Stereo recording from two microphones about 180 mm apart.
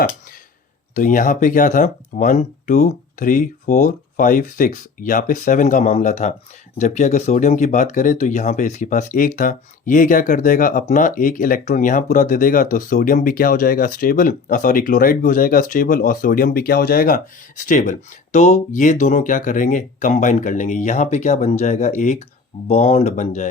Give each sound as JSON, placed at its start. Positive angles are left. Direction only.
{"t": 0.9, "sound": "speech", "side_deg": 45}